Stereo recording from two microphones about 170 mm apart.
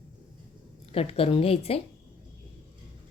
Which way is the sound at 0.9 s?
35° left (ahead or behind).